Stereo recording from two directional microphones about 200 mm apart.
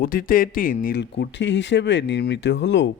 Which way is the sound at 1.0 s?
60° left (ahead or behind).